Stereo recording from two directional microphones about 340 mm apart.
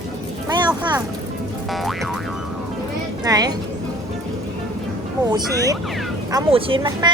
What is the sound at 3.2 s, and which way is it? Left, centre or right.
Speech, centre.